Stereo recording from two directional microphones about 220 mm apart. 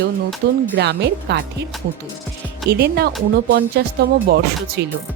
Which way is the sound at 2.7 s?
45° right (ahead or behind).